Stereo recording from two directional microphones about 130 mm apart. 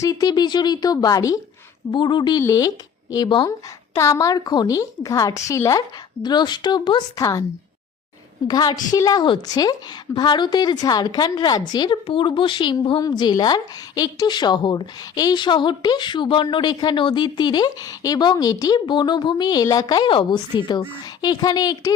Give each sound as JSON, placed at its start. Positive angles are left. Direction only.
{"t": 0.0, "sound": "a woman's voice", "side_deg": 30}
{"t": 3.9, "sound": "a woman's voice", "side_deg": 25}
{"t": 7.2, "sound": "a woman's voice", "side_deg": 25}
{"t": 8.4, "sound": "a woman's voice", "side_deg": 35}